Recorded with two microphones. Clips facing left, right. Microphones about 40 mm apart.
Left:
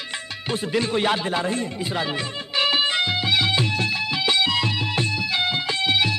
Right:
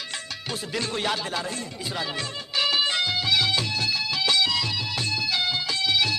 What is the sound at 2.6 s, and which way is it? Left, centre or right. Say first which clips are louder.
Music: left 3 dB; left.